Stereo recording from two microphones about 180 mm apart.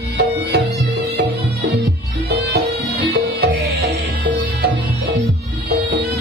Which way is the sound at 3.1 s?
70° right (ahead or behind).